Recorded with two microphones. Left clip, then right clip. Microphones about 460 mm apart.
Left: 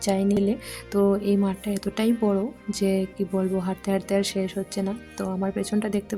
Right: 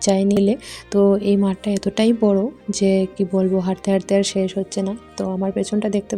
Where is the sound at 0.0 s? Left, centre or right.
Left.